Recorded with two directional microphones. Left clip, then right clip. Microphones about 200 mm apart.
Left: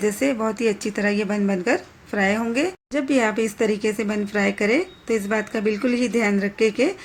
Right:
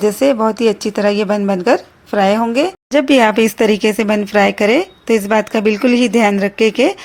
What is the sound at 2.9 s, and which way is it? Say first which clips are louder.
Speech: right 11 dB; 40° right (ahead or behind).